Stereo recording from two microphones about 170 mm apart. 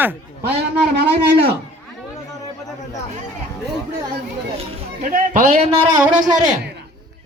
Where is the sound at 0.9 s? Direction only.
70° right (ahead or behind).